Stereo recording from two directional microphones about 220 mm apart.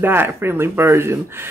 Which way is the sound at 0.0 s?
10° right (ahead or behind).